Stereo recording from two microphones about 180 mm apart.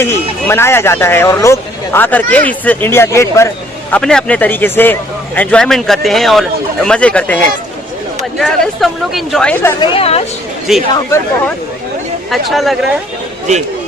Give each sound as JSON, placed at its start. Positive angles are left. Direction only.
{"t": 0.0, "sound": "speech", "side_deg": 15}
{"t": 9.8, "sound": "a woman's voice", "side_deg": 30}
{"t": 10.7, "sound": "speech", "side_deg": 0}
{"t": 12.3, "sound": "speech", "side_deg": 0}